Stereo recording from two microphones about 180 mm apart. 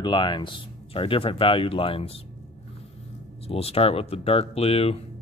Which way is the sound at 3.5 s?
35° left (ahead or behind).